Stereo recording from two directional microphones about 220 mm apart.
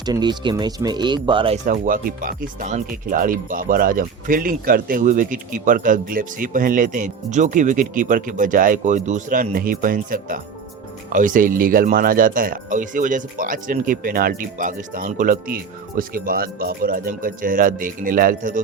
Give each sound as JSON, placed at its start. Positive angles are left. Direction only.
{"t": 0.0, "sound": "speech", "side_deg": -20}